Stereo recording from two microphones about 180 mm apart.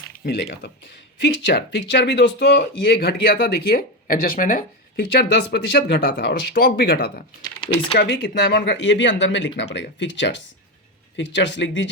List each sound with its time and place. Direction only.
0.3 s speech: 65° left (ahead or behind)
7.4 s speech: 30° left (ahead or behind)
7.9 s speech: 65° left (ahead or behind); by 11.9 s 85° left